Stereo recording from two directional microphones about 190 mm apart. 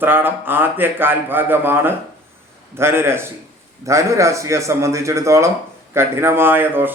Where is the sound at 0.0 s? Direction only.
10° right (ahead or behind).